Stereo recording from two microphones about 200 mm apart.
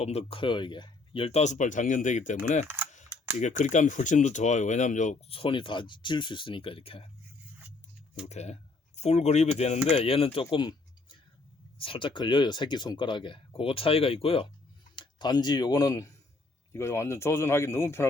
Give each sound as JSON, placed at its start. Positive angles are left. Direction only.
{"t": 0.0, "sound": "speech", "side_deg": 30}
{"t": 8.3, "sound": "speech", "side_deg": 35}
{"t": 10.5, "sound": "a sound", "side_deg": 25}
{"t": 11.8, "sound": "speech", "side_deg": 25}